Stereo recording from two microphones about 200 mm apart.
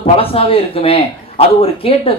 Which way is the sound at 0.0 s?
30° left (ahead or behind).